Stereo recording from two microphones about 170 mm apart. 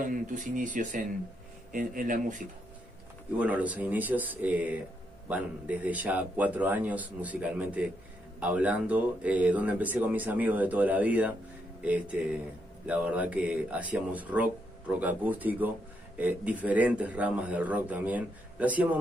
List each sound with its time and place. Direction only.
0.0 s speech: 50° right (ahead or behind)
3.3 s speech: 10° right (ahead or behind)